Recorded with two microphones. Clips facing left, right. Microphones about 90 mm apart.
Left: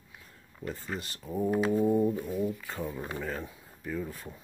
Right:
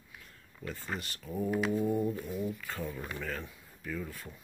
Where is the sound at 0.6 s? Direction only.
20° left (ahead or behind).